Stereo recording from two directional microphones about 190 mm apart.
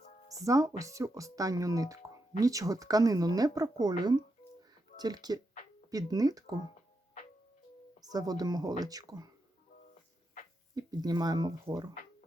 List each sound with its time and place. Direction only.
0.4 s speech: 15° right (ahead or behind)
8.1 s speech: 20° right (ahead or behind)
10.8 s speech: 20° right (ahead or behind)